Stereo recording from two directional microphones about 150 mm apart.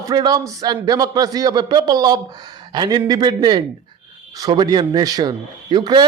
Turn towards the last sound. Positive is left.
turn(degrees=-30)  # may be behind; listen again after turning